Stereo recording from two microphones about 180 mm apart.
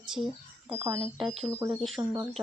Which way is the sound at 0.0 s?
5° right (ahead or behind).